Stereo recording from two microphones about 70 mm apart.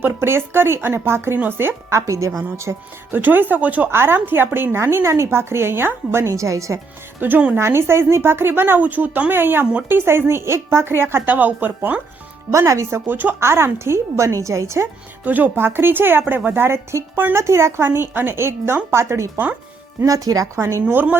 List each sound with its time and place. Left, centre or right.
0.0 s a woman's voice: right
3.1 s speech: right
3.9 s a woman's voice: right
7.2 s speech: right
7.6 s a woman's voice: right
12.5 s speech: right
13.1 s a woman's voice: right
15.2 s a woman's voice: right
20.1 s speech: right
20.8 s speech: right